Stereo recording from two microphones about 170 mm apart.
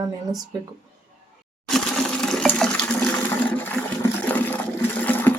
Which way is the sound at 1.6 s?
5° left (ahead or behind).